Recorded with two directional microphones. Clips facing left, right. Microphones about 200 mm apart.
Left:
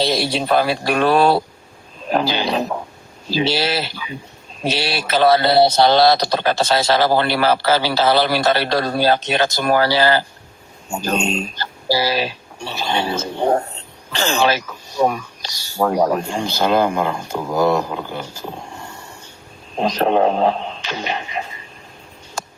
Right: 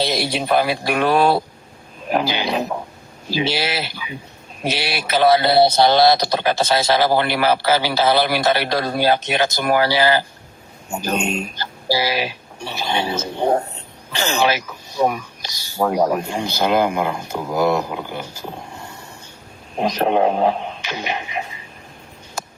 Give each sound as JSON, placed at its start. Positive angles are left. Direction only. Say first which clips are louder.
{"t": 0.0, "sound": "speech", "louder": "left 2 dB", "side_deg": -15}
{"t": 19.8, "sound": "speech", "louder": "left 1 dB", "side_deg": -15}